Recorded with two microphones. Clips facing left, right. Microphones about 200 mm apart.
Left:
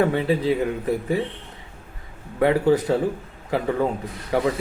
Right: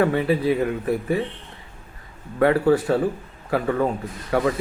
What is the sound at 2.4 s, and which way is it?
Speech, 20° left (ahead or behind).